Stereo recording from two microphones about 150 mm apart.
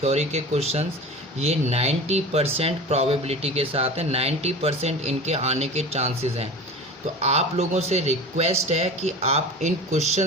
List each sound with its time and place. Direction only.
0.0 s speech: 45° right (ahead or behind)